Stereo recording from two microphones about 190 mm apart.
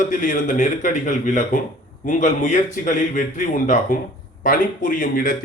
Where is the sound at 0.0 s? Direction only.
45° left (ahead or behind).